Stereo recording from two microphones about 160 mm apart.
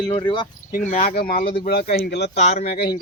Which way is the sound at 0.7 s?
55° left (ahead or behind).